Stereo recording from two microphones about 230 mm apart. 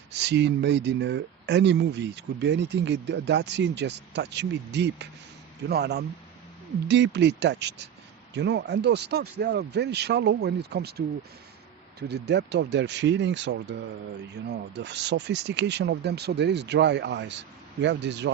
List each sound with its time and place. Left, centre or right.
0.1 s speech: right